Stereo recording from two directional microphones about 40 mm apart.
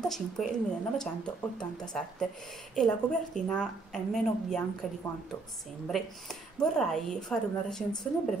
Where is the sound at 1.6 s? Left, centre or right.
Centre.